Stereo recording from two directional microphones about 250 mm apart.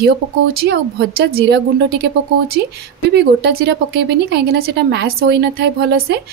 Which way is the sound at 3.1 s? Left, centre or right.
Right.